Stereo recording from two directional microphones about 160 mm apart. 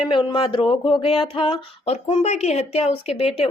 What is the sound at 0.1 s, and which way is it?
Speech, 30° left (ahead or behind).